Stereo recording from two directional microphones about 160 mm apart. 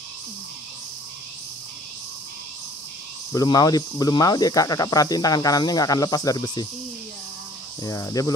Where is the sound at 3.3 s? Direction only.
25° left (ahead or behind).